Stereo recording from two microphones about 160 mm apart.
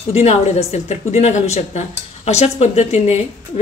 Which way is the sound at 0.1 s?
40° left (ahead or behind).